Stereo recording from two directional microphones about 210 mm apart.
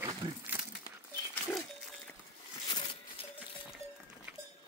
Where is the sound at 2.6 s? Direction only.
20° left (ahead or behind).